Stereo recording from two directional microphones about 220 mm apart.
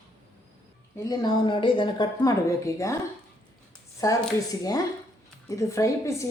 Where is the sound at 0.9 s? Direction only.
15° left (ahead or behind).